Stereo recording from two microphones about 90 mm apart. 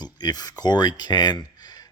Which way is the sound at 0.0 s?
50° left (ahead or behind).